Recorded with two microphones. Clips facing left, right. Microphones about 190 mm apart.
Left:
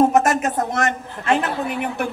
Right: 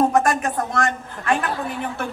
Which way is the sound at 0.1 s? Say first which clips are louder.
Left 2 dB; 20° left (ahead or behind).